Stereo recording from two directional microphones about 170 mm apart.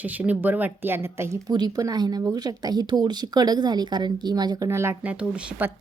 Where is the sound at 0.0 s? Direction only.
10° right (ahead or behind).